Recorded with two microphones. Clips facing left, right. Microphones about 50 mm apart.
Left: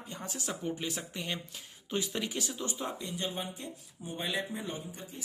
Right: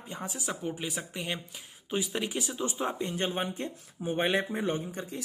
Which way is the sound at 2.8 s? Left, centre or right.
Right.